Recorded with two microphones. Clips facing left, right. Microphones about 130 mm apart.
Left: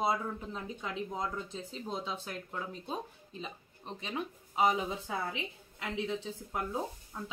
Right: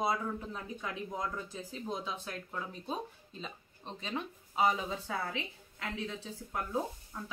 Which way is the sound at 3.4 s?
10° left (ahead or behind).